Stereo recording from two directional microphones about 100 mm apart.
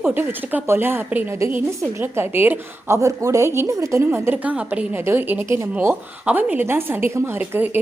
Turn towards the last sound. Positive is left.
turn(degrees=-20)  # may be behind; listen again after turning